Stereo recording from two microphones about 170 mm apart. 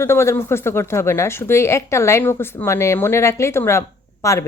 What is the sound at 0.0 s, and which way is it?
A woman's voice, 15° left (ahead or behind).